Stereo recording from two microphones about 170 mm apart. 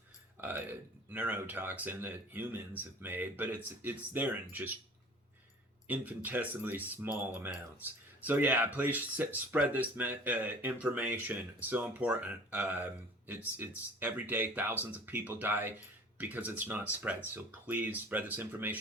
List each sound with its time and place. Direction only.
0.4 s speech: 10° right (ahead or behind)
5.9 s speech: 10° right (ahead or behind)
8.2 s speech: 10° right (ahead or behind)